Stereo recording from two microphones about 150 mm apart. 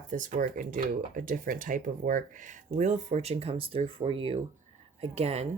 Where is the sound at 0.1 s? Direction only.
60° right (ahead or behind).